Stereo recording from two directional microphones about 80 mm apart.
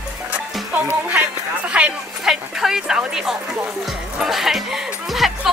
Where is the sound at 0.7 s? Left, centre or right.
Right.